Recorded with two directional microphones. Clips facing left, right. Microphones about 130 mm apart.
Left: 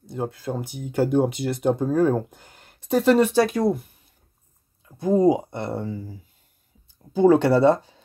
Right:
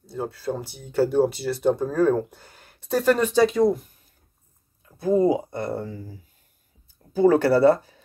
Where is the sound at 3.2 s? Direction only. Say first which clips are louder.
Even; 60° left (ahead or behind).